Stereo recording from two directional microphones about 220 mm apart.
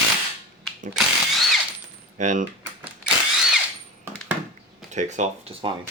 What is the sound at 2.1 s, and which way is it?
Coin, 35° right (ahead or behind).